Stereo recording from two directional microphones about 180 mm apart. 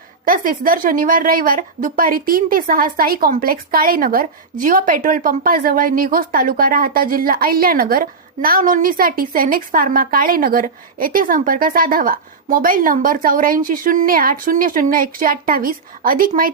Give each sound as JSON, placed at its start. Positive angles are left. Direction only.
{"t": 0.3, "sound": "a woman's voice", "side_deg": -50}